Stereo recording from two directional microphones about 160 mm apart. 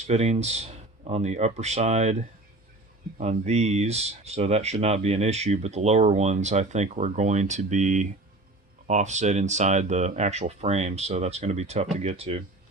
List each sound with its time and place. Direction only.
0.1 s speech: 40° right (ahead or behind)